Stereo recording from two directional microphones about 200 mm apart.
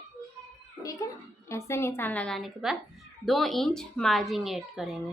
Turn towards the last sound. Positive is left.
turn(degrees=0)  # may be behind; listen again after turning